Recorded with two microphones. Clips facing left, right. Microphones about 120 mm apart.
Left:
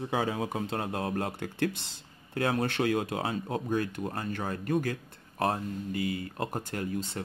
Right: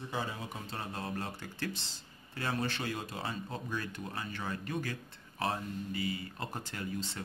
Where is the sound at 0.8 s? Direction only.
55° left (ahead or behind).